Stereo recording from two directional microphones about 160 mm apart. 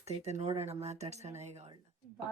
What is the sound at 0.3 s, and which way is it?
Speech, 40° right (ahead or behind).